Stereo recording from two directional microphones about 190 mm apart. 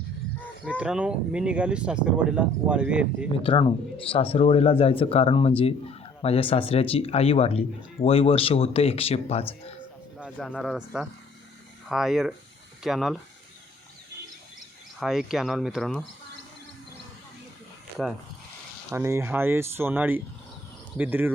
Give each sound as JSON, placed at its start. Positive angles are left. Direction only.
{"t": 0.8, "sound": "speech", "side_deg": -5}
{"t": 3.3, "sound": "speech", "side_deg": 30}
{"t": 10.2, "sound": "speech", "side_deg": -5}
{"t": 15.0, "sound": "speech", "side_deg": 0}
{"t": 18.9, "sound": "speech", "side_deg": -15}